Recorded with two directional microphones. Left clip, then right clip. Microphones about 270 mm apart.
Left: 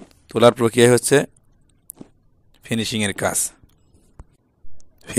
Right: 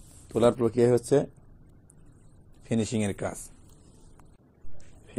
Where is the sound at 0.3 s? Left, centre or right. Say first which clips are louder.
Left 9 dB; left.